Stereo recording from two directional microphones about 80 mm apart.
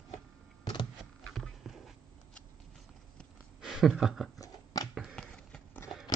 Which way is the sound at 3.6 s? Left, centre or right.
Centre.